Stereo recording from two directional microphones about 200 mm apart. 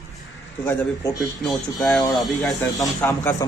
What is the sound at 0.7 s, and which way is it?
Speech, 15° left (ahead or behind).